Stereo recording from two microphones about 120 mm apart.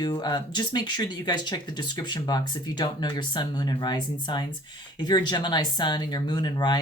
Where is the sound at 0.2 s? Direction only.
40° left (ahead or behind).